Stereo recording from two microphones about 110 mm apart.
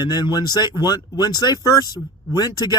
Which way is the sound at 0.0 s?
40° left (ahead or behind).